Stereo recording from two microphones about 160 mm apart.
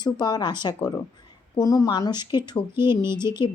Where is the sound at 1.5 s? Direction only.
20° left (ahead or behind).